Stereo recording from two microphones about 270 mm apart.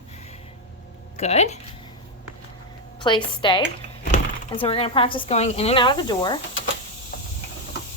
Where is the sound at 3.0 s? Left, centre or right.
Centre.